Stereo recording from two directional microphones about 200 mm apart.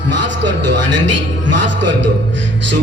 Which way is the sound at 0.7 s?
65° right (ahead or behind).